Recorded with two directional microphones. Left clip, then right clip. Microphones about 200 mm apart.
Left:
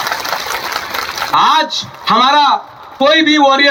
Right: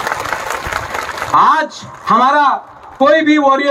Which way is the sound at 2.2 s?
5° right (ahead or behind).